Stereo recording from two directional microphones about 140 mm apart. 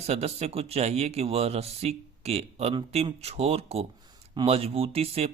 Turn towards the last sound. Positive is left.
turn(degrees=-45)  # may be behind; listen again after turning